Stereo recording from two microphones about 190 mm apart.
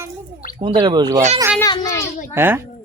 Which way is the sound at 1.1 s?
40° right (ahead or behind).